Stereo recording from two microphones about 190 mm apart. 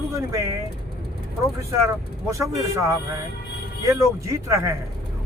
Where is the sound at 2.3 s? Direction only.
15° right (ahead or behind).